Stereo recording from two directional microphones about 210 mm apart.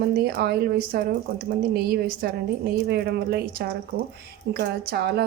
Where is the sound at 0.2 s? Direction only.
50° right (ahead or behind).